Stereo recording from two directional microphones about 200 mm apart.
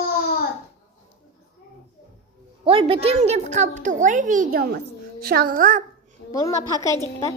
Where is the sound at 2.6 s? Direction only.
30° right (ahead or behind).